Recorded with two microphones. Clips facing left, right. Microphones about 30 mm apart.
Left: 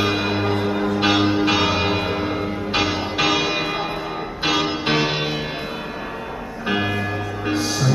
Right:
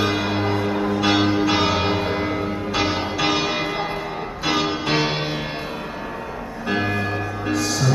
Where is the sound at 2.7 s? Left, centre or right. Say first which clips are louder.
Left 2 dB; left.